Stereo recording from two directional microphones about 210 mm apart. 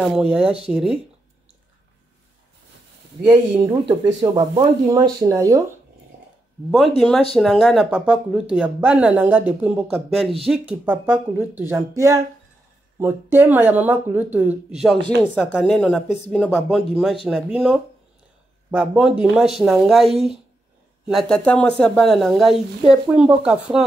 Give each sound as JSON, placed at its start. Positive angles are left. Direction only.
{"t": 0.0, "sound": "speech", "side_deg": -5}
{"t": 3.3, "sound": "speech", "side_deg": -20}
{"t": 7.0, "sound": "speech", "side_deg": 5}